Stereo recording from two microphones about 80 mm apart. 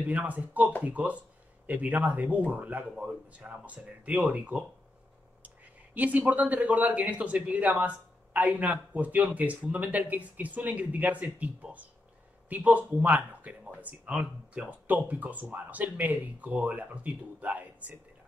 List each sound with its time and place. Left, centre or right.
0.0 s speech: centre